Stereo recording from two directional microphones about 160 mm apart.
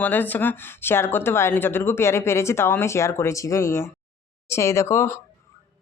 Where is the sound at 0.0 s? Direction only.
10° left (ahead or behind).